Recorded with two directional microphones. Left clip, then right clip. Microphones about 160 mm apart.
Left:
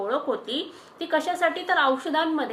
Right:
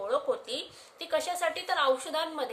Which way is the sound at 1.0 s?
60° right (ahead or behind).